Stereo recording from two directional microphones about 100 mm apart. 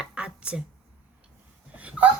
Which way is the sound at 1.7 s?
15° right (ahead or behind).